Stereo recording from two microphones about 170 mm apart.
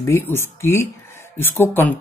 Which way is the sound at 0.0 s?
15° left (ahead or behind).